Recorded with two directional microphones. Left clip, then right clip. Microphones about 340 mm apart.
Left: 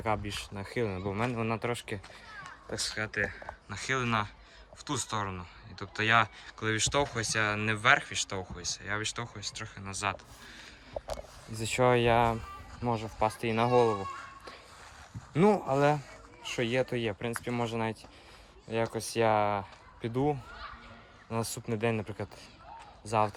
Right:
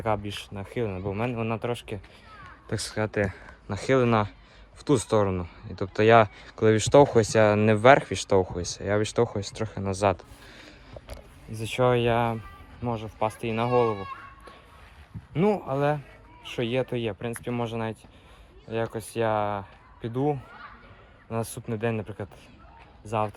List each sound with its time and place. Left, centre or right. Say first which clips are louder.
0.0 s speech: right 4 dB; centre
3.0 s speech: right 10 dB; right
3.7 s speech: right 8 dB; centre
11.7 s speech: right 2 dB; centre
15.3 s speech: right 1 dB; centre